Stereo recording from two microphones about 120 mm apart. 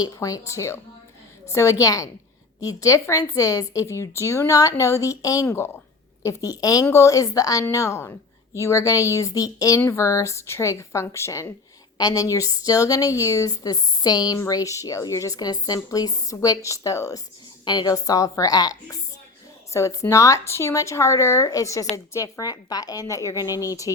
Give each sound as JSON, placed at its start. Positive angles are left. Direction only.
{"t": 0.0, "sound": "a woman's voice", "side_deg": 30}